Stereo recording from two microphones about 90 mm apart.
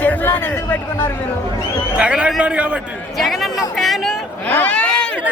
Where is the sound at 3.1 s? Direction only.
Centre (ahead or behind).